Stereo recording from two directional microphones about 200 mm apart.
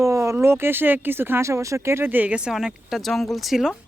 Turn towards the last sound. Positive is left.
turn(degrees=0)  # may be behind; listen again after turning